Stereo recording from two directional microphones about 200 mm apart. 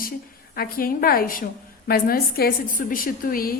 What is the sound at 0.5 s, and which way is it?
A woman's voice, 45° left (ahead or behind).